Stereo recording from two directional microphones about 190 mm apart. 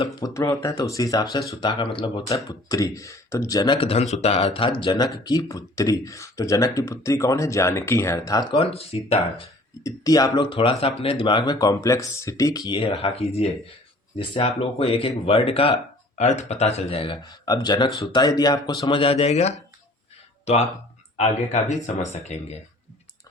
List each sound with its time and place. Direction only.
0.0 s speech: 20° left (ahead or behind)
8.5 s speech: 30° left (ahead or behind)
9.8 s speech: 20° left (ahead or behind); by 22.5 s 35° left (ahead or behind)